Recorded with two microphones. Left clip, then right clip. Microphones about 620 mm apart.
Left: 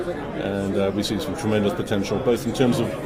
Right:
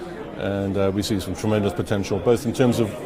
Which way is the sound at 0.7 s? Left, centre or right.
Right.